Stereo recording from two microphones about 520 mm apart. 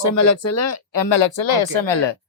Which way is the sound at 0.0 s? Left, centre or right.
Left.